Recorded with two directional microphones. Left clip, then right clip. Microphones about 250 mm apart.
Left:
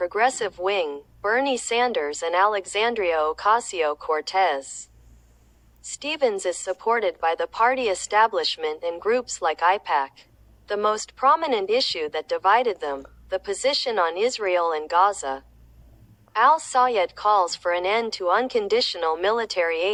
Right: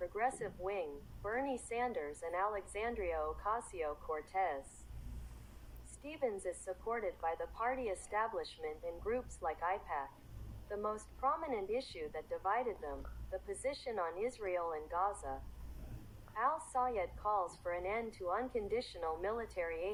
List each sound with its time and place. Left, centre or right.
0.0 s speech: left
6.0 s speech: left